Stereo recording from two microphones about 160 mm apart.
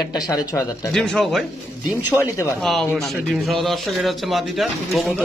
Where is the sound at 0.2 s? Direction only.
20° left (ahead or behind).